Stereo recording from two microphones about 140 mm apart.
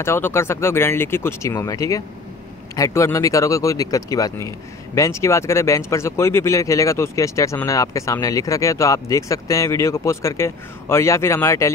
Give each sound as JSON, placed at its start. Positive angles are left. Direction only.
{"t": 0.0, "sound": "speech", "side_deg": 20}